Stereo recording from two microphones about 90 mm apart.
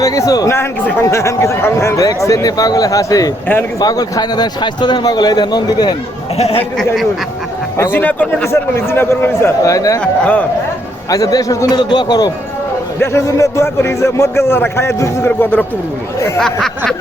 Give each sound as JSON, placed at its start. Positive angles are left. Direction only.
{"t": 0.0, "sound": "speech", "side_deg": 40}
{"t": 6.7, "sound": "speech", "side_deg": 0}
{"t": 7.8, "sound": "speech", "side_deg": 25}
{"t": 8.4, "sound": "speech", "side_deg": 30}
{"t": 9.6, "sound": "speech", "side_deg": 40}
{"t": 10.0, "sound": "a man's voice", "side_deg": 15}
{"t": 11.1, "sound": "speech", "side_deg": 40}
{"t": 11.8, "sound": "speech", "side_deg": 55}
{"t": 13.0, "sound": "speech", "side_deg": 30}
{"t": 15.4, "sound": "speech", "side_deg": 20}
{"t": 16.4, "sound": "speech", "side_deg": 5}